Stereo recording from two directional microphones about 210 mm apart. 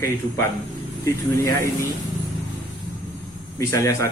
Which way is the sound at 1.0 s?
15° left (ahead or behind).